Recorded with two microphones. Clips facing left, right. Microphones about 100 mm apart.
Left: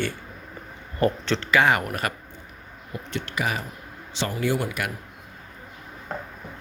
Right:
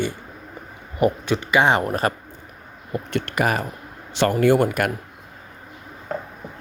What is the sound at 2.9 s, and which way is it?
Speech, 55° right (ahead or behind).